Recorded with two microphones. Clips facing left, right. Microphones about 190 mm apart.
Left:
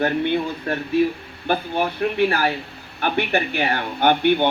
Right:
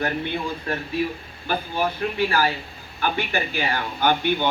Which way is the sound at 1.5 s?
60° left (ahead or behind).